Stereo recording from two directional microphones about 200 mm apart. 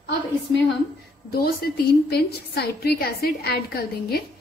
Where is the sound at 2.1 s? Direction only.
50° left (ahead or behind).